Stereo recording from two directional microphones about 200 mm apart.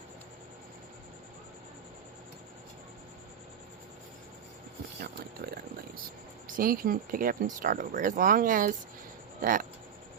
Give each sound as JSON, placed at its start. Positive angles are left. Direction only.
{"t": 4.9, "sound": "speech", "side_deg": -50}